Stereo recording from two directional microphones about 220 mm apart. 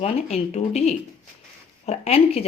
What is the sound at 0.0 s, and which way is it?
A woman's voice, 30° left (ahead or behind).